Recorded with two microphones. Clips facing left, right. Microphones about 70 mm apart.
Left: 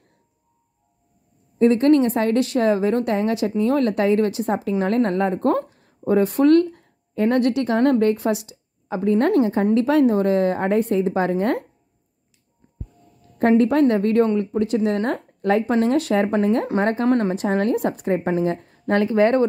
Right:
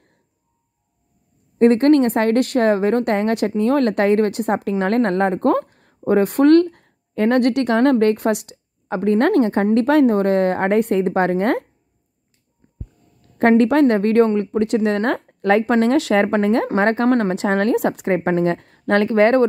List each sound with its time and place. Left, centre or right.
1.6 s a woman's voice: right
13.4 s a woman's voice: right